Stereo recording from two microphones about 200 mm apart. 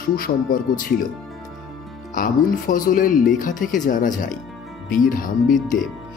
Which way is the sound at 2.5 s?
45° left (ahead or behind).